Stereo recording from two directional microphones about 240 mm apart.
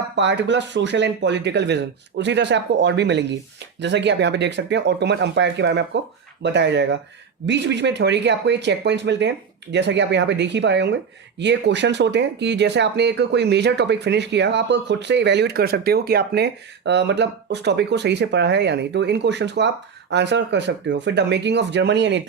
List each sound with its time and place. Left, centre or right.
0.2 s speech: right